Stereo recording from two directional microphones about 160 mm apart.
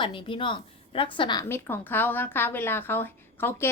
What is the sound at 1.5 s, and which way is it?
A woman's voice, 15° left (ahead or behind).